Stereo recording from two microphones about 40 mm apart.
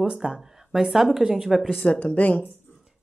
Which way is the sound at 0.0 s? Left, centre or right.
Centre.